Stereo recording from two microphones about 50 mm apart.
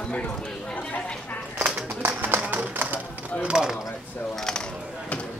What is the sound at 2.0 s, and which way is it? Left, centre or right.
Music, right.